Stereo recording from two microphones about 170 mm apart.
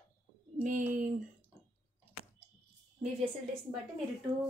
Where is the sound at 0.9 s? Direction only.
45° right (ahead or behind).